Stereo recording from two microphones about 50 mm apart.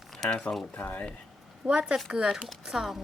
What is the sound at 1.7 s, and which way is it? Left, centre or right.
Speech, right.